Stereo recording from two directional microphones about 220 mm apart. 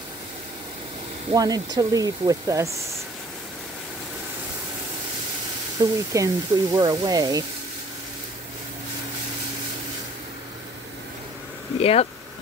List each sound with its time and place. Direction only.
1.3 s speech: 15° right (ahead or behind)
5.8 s speech: 15° right (ahead or behind)
11.8 s speech: 25° left (ahead or behind)